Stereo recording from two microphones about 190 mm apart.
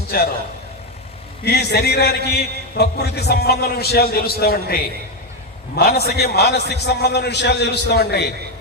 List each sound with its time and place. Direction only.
0.1 s a man's voice: 50° left (ahead or behind)
1.5 s a man's voice: 60° left (ahead or behind)